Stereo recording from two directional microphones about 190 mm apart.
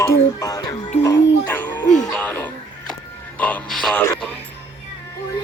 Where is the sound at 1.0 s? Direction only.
10° left (ahead or behind).